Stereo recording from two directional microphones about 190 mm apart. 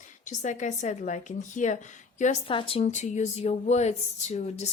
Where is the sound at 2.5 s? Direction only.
30° left (ahead or behind).